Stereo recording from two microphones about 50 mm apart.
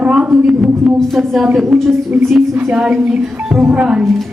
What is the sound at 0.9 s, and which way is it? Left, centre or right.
Speech, centre.